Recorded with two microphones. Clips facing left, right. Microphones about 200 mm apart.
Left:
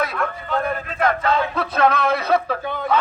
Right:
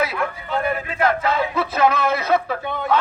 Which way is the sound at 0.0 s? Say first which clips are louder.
Right 1 dB; 10° right (ahead or behind).